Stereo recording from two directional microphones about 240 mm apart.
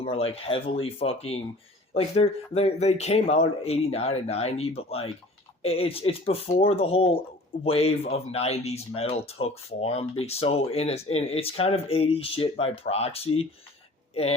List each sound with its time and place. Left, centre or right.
0.0 s speech: left